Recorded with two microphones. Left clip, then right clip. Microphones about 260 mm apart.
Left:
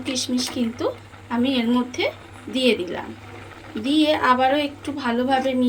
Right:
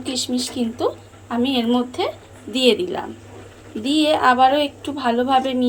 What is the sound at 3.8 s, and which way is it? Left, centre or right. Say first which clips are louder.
A woman's voice: right 2 dB; centre.